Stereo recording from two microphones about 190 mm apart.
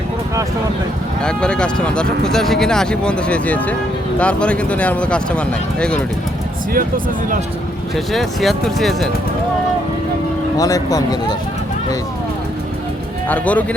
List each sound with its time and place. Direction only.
1.2 s speech: 5° left (ahead or behind)
6.7 s speech: 45° right (ahead or behind)
7.9 s speech: centre (ahead or behind)
10.6 s speech: 20° left (ahead or behind)
13.2 s speech: 10° left (ahead or behind)